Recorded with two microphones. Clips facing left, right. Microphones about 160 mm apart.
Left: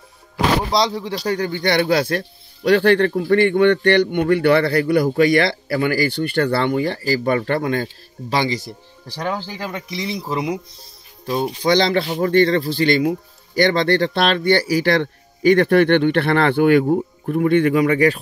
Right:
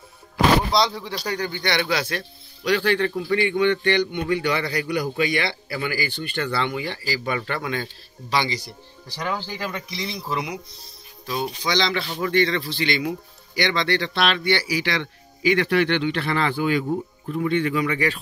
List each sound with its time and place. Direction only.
0.7 s speech: 35° left (ahead or behind)
9.1 s speech: 30° left (ahead or behind)
10.1 s speech: 20° left (ahead or behind)
11.6 s speech: 55° left (ahead or behind)